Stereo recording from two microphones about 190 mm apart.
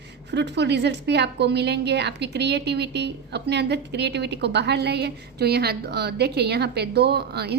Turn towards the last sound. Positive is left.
turn(degrees=-60)  # may be behind; listen again after turning